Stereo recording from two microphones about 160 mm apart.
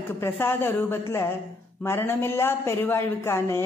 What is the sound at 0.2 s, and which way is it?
A woman's voice, 15° left (ahead or behind).